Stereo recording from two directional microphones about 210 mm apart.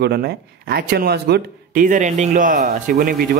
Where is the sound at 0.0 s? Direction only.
50° right (ahead or behind).